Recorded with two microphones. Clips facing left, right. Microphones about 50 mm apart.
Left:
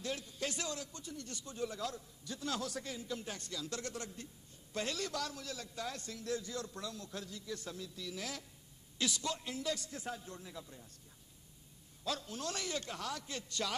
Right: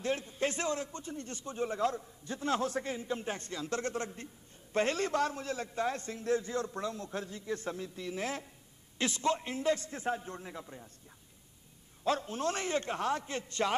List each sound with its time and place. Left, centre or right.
0.0 s a man's voice: right
12.0 s a man's voice: right